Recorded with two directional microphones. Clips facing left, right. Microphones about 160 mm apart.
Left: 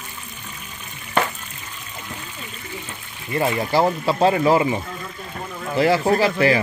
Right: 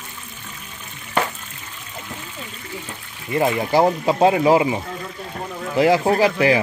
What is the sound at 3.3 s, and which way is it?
Speech, 15° right (ahead or behind).